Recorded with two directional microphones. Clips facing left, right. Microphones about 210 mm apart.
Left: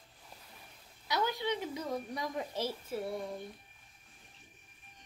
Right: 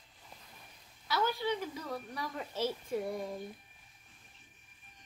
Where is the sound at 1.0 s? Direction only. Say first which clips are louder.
Right 1 dB; 20° left (ahead or behind).